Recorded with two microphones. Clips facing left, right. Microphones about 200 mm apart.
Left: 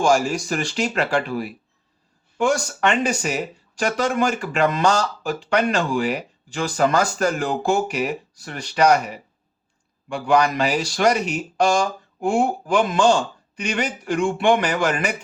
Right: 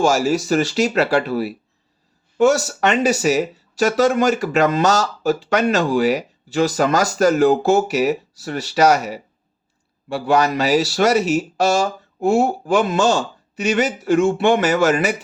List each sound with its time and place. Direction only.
0.3 s a man's voice: 35° right (ahead or behind)
2.8 s a man's voice: 40° right (ahead or behind)